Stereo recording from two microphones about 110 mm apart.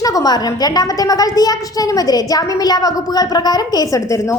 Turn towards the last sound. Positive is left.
turn(degrees=35)  # may be behind; listen again after turning